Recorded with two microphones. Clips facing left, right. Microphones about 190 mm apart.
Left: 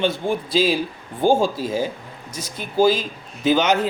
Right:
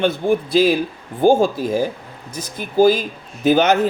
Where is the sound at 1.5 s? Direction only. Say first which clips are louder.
Right 4 dB; 15° right (ahead or behind).